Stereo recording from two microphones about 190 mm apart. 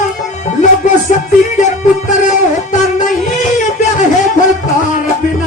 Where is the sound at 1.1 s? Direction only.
40° left (ahead or behind).